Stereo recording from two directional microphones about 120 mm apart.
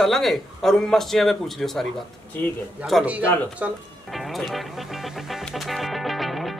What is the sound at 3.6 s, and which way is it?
Speech, 10° right (ahead or behind).